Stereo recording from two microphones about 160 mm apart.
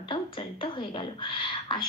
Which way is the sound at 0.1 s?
30° left (ahead or behind).